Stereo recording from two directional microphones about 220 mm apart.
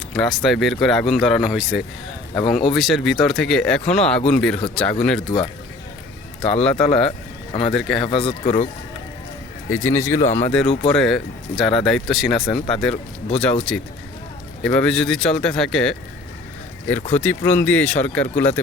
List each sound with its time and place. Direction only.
0.2 s speech: centre (ahead or behind)
5.2 s a man's voice: 20° left (ahead or behind)
6.4 s speech: 5° left (ahead or behind)
8.3 s speech: 30° left (ahead or behind)
9.6 s speech: 10° left (ahead or behind)
17.1 s speech: 10° left (ahead or behind)